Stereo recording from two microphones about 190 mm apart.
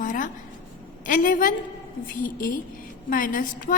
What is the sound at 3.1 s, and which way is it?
Speech, 45° left (ahead or behind).